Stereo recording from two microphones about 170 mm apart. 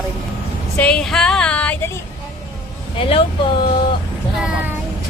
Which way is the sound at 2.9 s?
30° left (ahead or behind).